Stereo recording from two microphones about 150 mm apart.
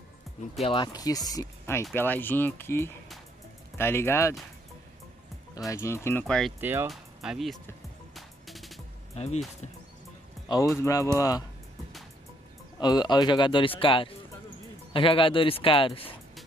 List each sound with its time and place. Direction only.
0.6 s speech: 35° left (ahead or behind); by 4.4 s 20° left (ahead or behind)
5.7 s speech: 20° left (ahead or behind)
6.2 s speech: 5° left (ahead or behind)
6.6 s speech: 15° right (ahead or behind)
6.9 s speech: centre (ahead or behind)
8.1 s music: centre (ahead or behind)
9.1 s speech: 45° left (ahead or behind)
10.8 s speech: 20° left (ahead or behind)
12.7 s speech: 25° left (ahead or behind)